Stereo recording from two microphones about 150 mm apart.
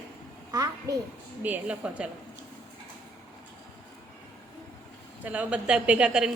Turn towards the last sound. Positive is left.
turn(degrees=-5)  # may be behind; listen again after turning